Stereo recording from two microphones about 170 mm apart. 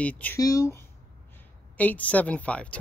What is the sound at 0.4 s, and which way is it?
Speech, 20° left (ahead or behind).